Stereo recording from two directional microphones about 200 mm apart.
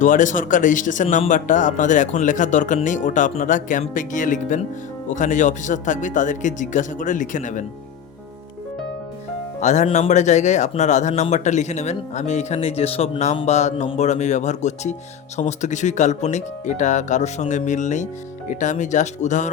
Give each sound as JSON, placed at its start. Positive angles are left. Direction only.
{"t": 0.0, "sound": "speech", "side_deg": 40}
{"t": 9.6, "sound": "speech", "side_deg": 35}